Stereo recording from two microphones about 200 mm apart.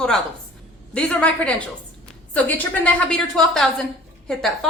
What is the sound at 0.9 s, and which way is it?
Speech, 5° left (ahead or behind).